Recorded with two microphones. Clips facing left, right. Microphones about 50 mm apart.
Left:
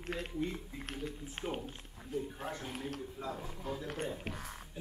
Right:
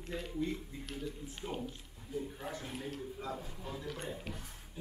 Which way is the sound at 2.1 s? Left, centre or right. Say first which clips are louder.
Left 2 dB; left.